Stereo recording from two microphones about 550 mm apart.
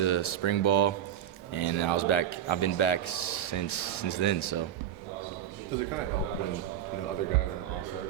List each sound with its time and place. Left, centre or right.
0.0 s a man's voice: left